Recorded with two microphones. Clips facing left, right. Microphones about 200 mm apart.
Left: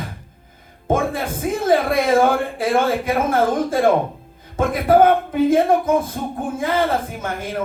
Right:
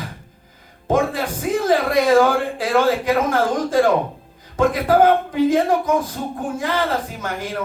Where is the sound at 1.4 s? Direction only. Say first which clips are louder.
Left 1 dB; 25° left (ahead or behind).